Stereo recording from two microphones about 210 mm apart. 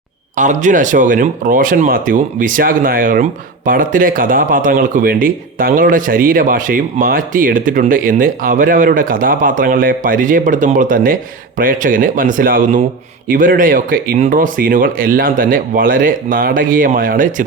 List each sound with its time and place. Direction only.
0.3 s speech: 35° right (ahead or behind)